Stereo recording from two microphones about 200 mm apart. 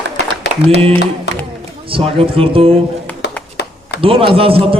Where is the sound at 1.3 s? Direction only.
60° left (ahead or behind).